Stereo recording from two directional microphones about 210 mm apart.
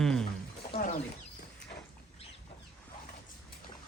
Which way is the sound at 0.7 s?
40° left (ahead or behind).